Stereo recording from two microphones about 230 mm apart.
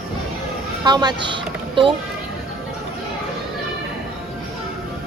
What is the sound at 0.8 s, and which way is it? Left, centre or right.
Speech, centre.